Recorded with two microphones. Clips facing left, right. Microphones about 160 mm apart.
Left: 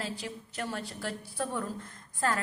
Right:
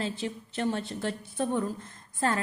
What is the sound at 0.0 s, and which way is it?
A woman's voice, 25° right (ahead or behind).